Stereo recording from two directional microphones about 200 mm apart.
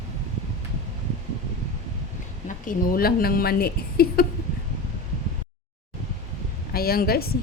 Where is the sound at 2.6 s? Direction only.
45° left (ahead or behind).